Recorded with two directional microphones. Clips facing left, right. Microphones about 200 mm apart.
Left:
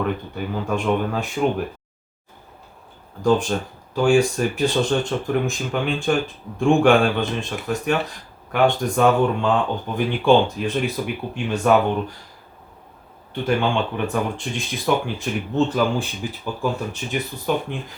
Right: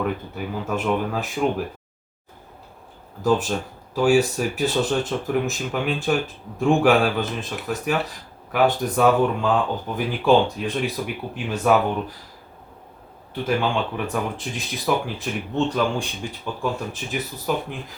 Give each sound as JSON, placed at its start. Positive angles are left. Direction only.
{"t": 0.0, "sound": "speech", "side_deg": -5}
{"t": 3.2, "sound": "speech", "side_deg": -5}
{"t": 13.3, "sound": "speech", "side_deg": 0}